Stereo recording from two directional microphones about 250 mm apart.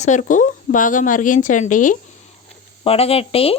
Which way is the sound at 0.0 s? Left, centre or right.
Left.